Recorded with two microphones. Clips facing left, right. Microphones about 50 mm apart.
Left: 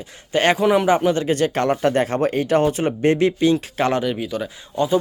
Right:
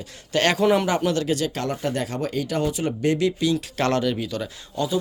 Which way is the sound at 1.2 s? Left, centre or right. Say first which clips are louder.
Left 6 dB; left.